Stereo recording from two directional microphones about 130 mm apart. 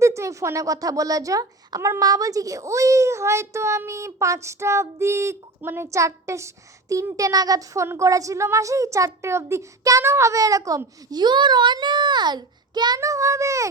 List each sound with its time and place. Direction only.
0.0 s speech: 20° right (ahead or behind)